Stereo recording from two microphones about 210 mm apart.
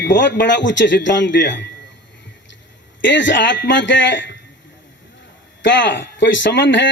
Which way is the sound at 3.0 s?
60° left (ahead or behind).